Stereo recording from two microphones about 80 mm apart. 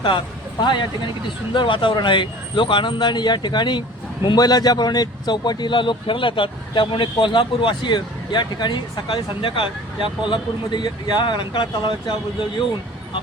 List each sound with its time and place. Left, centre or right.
0.6 s speech: left
1.5 s speech: left
4.4 s speech: left